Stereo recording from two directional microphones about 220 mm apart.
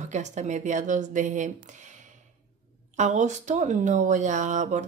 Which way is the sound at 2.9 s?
35° right (ahead or behind).